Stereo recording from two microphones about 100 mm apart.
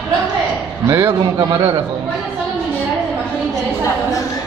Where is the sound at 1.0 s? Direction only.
50° right (ahead or behind).